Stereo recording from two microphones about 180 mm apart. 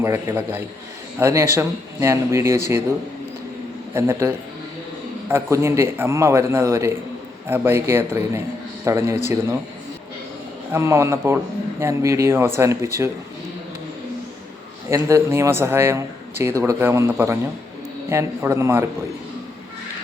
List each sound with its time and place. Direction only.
0.0 s speech: 15° right (ahead or behind)
3.9 s a man's voice: 15° right (ahead or behind)
10.7 s speech: 15° right (ahead or behind)
14.8 s speech: 15° right (ahead or behind)